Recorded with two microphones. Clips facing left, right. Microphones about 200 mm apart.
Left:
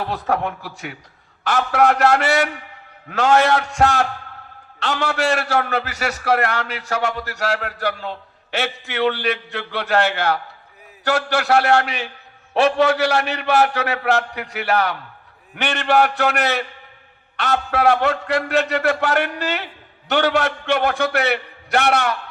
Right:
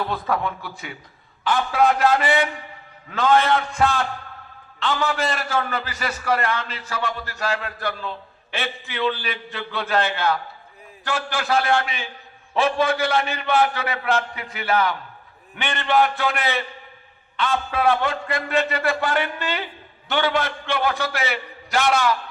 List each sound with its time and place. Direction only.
0.0 s a man's voice: 75° left (ahead or behind)